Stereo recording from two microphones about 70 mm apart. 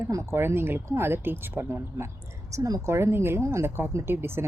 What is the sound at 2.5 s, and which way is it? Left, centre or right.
Speech, right.